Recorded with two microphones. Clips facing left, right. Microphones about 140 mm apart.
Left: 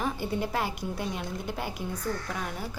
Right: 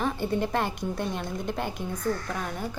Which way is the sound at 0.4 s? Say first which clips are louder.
Right 3 dB; 5° left (ahead or behind).